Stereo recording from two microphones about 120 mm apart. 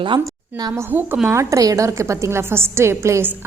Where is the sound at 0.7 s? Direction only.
15° right (ahead or behind).